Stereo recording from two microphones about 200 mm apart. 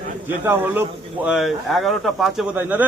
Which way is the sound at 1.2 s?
Centre (ahead or behind).